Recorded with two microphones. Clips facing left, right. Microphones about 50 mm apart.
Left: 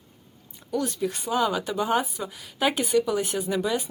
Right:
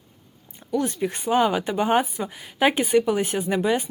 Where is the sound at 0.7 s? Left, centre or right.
Right.